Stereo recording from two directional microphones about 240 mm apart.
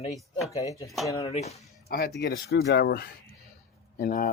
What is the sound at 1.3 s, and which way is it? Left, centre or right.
Speech, left.